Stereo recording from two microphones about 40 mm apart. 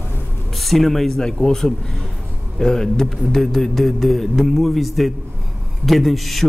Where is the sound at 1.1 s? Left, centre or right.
Centre.